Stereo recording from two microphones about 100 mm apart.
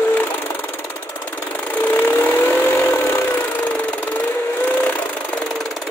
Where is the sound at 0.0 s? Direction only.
15° left (ahead or behind).